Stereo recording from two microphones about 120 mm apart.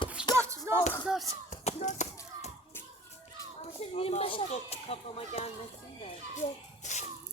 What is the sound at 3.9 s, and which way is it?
Speech, 55° left (ahead or behind).